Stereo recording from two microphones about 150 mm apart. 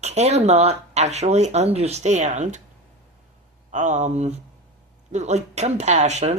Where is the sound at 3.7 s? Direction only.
55° right (ahead or behind).